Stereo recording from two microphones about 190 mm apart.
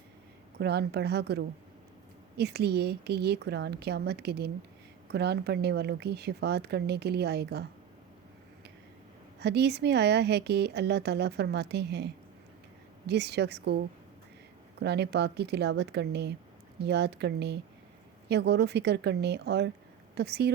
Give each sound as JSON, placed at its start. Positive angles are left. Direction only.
{"t": 0.6, "sound": "speech", "side_deg": -60}
{"t": 9.4, "sound": "speech", "side_deg": -60}
{"t": 13.1, "sound": "speech", "side_deg": -60}